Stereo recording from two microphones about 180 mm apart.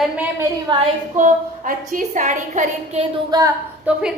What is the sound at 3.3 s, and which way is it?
Speech, 20° right (ahead or behind).